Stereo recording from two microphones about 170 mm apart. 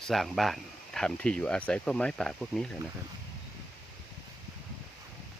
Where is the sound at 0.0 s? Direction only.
Centre (ahead or behind).